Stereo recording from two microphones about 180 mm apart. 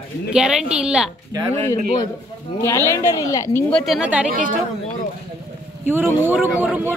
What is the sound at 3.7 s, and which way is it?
Speech, centre (ahead or behind).